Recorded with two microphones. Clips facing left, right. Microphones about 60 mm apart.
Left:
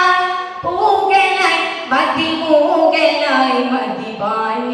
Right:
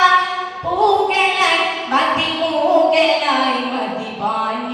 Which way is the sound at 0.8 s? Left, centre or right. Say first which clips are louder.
Left 3 dB; left.